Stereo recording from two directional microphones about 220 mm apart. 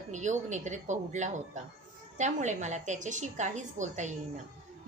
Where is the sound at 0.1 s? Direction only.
35° right (ahead or behind).